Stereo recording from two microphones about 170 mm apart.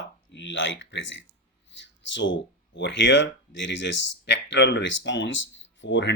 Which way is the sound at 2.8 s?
90° left.